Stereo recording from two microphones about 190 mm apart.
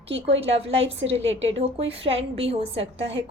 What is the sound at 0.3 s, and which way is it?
A woman's voice, 30° right (ahead or behind).